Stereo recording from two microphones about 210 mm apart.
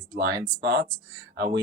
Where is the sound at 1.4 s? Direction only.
50° right (ahead or behind).